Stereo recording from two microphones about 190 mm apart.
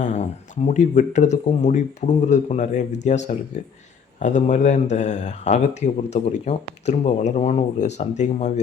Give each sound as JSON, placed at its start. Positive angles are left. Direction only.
{"t": 0.0, "sound": "speech", "side_deg": 40}